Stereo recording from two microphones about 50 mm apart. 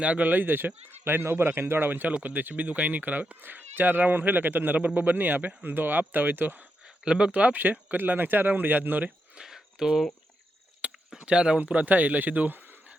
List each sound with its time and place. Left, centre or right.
0.0 s speech: right
1.9 s speech: right
7.0 s speech: centre
7.6 s speech: right
9.4 s cricket: centre
10.8 s a sound: right
11.3 s speech: centre